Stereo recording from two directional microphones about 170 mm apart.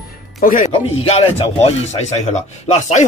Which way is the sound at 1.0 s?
35° left (ahead or behind).